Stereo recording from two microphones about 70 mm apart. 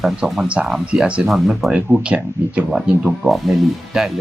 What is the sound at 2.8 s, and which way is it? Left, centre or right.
Speech, centre.